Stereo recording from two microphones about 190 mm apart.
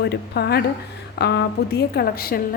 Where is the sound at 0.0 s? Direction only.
60° left (ahead or behind).